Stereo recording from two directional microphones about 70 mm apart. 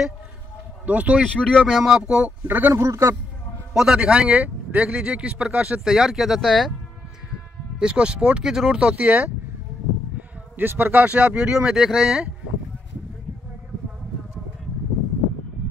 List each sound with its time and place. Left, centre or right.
0.8 s speech: centre
1.2 s speech: centre
1.7 s a man's voice: centre
2.4 s speech: right
2.7 s a man's voice: right
3.7 s a man's voice: centre
5.9 s speech: centre
7.8 s a man's voice: centre